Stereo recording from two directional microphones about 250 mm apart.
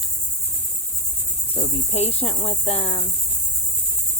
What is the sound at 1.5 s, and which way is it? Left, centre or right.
Speech, left.